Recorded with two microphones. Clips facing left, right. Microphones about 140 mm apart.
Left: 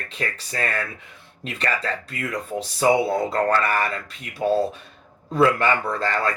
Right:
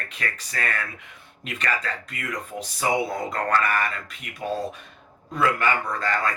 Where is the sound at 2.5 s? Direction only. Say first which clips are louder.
Left 6 dB; 30° left (ahead or behind).